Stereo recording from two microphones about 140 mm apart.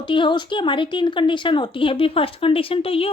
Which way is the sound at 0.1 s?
35° left (ahead or behind).